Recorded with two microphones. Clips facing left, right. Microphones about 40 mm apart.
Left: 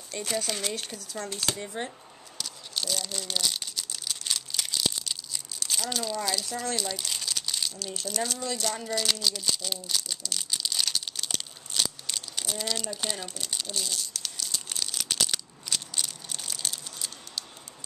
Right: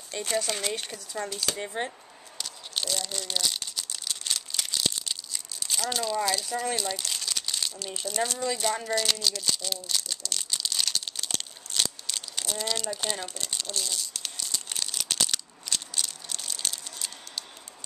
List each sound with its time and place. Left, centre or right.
0.1 s speech: centre
1.7 s a sound: centre
2.9 s crumpling: centre
6.2 s speech: centre
8.9 s crumpling: centre
14.5 s crushing: centre